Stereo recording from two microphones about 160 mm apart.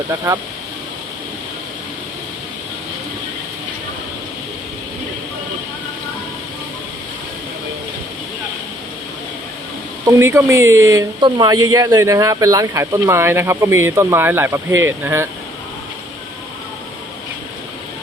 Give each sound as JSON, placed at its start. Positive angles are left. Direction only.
{"t": 10.1, "sound": "speech", "side_deg": -15}